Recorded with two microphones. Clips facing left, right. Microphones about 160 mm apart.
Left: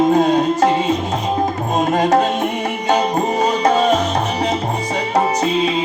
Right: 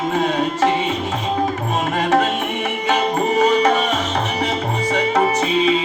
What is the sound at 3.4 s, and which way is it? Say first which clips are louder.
Music: even; 35° left (ahead or behind).